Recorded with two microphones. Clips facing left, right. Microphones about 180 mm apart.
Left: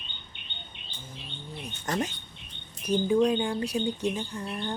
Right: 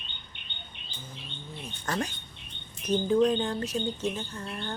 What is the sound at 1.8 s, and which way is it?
Speech, 20° left (ahead or behind).